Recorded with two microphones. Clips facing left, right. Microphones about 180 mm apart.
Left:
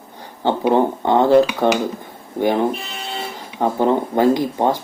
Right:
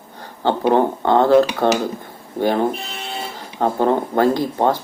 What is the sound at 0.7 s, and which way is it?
Speech, 15° left (ahead or behind).